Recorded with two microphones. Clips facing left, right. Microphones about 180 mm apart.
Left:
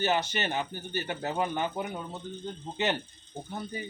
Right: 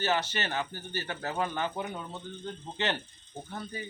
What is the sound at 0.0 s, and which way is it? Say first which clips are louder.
Speech: left 2 dB; 15° left (ahead or behind).